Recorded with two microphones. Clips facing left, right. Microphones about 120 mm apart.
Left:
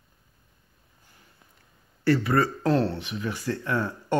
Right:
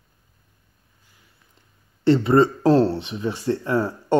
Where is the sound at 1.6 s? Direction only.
25° right (ahead or behind).